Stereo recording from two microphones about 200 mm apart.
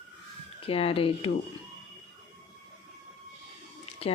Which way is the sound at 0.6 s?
30° left (ahead or behind).